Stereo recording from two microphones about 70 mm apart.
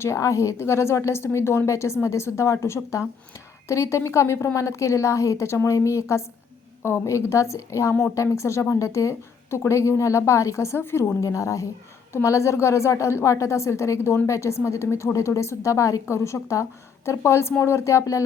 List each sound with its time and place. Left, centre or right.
0.0 s a woman's voice: left
11.2 s a woman's voice: left